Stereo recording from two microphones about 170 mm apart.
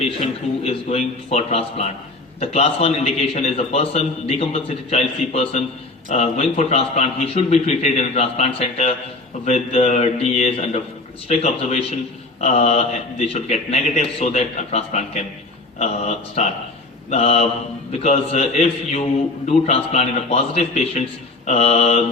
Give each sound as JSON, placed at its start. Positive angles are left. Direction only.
{"t": 0.2, "sound": "a man's voice", "side_deg": 35}